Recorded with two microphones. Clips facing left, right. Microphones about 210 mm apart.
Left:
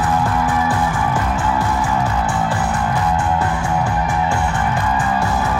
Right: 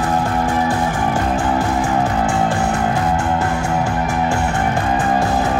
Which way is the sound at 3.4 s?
45° right (ahead or behind).